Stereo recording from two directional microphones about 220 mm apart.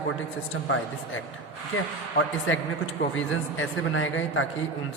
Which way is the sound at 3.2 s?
65° left (ahead or behind).